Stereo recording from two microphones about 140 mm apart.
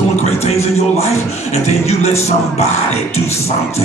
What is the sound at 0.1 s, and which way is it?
A man's voice, 50° left (ahead or behind).